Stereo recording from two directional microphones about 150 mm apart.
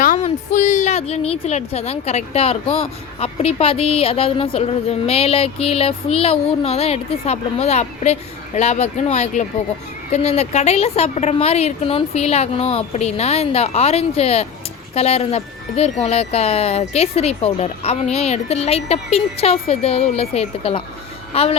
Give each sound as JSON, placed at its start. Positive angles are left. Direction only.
{"t": 0.0, "sound": "a woman's voice", "side_deg": 60}